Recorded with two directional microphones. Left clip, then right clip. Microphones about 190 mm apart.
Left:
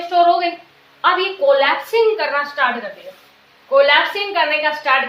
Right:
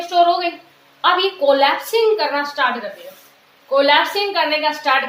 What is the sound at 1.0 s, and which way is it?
A woman's voice, 30° right (ahead or behind).